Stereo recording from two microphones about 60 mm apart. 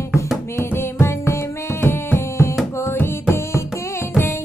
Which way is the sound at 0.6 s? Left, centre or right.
Left.